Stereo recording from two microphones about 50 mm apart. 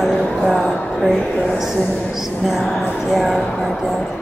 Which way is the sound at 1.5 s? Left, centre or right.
Centre.